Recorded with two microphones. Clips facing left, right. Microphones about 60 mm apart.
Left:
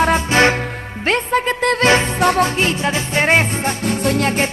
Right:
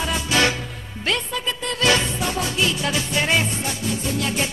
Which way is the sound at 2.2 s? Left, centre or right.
Left.